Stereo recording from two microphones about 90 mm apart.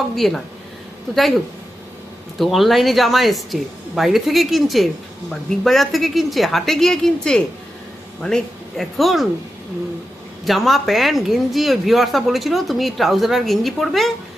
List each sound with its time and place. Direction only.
0.2 s a woman's voice: 5° left (ahead or behind)
2.4 s a woman's voice: centre (ahead or behind)
8.8 s a woman's voice: centre (ahead or behind)
10.4 s a woman's voice: centre (ahead or behind)